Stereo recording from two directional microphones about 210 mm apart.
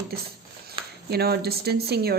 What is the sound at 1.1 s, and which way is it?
A woman's voice, 50° right (ahead or behind).